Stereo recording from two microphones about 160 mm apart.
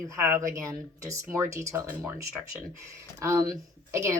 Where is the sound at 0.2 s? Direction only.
20° right (ahead or behind).